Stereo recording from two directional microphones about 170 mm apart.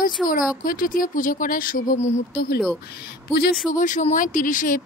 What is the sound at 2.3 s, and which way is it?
Speech, 65° left (ahead or behind).